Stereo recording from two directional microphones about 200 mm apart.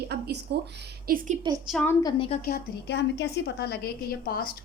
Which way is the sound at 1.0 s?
45° right (ahead or behind).